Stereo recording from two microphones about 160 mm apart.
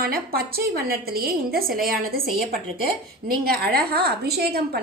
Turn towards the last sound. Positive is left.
turn(degrees=-80)